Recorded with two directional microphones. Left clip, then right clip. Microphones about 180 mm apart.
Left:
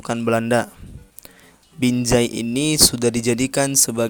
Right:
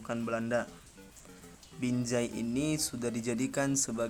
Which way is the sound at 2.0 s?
40° left (ahead or behind).